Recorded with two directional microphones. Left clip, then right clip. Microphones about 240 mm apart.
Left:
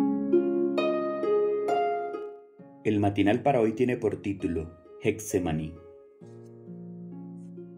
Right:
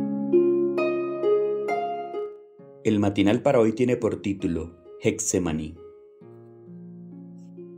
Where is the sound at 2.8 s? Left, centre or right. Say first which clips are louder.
Right 3 dB; right.